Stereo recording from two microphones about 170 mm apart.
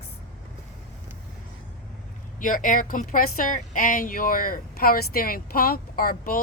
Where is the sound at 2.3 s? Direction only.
50° left (ahead or behind).